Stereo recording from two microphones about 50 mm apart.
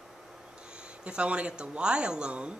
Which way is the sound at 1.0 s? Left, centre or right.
Right.